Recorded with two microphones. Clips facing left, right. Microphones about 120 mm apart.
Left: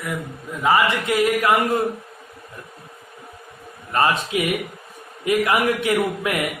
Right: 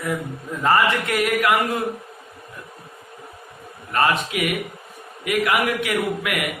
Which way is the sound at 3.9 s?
25° left (ahead or behind).